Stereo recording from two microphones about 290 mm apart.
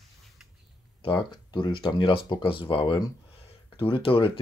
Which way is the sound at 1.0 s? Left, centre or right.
Centre.